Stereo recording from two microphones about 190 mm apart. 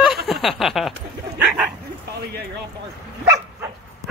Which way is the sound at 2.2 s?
55° right (ahead or behind).